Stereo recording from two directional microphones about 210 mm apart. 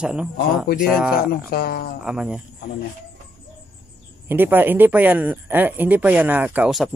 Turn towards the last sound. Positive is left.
turn(degrees=-5)  # may be behind; listen again after turning